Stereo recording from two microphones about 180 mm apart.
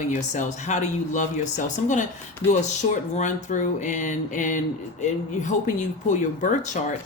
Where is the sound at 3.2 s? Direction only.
45° left (ahead or behind).